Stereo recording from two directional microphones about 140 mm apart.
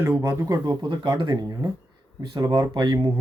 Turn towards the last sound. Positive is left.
turn(degrees=-30)  # may be behind; listen again after turning